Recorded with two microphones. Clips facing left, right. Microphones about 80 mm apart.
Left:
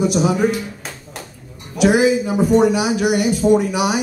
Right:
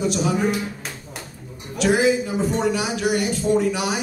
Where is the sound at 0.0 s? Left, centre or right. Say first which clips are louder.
Left 5 dB; centre.